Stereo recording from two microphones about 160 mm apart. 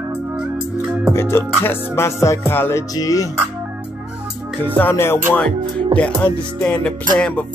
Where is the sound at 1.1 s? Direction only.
15° left (ahead or behind).